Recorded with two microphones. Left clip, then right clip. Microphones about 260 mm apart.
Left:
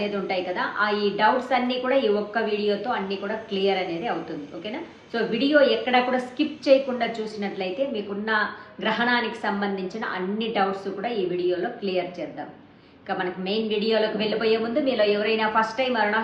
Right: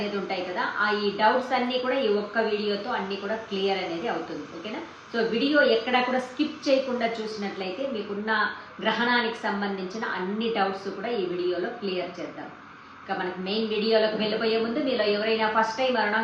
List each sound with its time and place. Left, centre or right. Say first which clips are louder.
0.3 s a woman's voice: left 2 dB; centre
5.1 s a woman's voice: left 2 dB; centre
8.8 s a woman's voice: left 1 dB; centre
13.1 s a woman's voice: left 2 dB; centre